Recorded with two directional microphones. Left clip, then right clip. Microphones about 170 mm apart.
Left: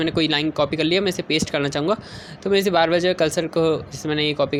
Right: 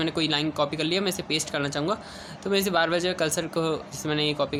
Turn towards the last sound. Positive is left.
turn(degrees=25)  # may be behind; listen again after turning